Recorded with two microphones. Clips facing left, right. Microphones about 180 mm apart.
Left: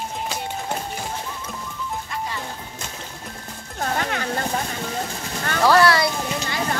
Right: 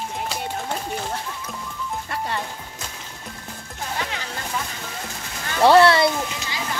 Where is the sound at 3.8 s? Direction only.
55° left (ahead or behind).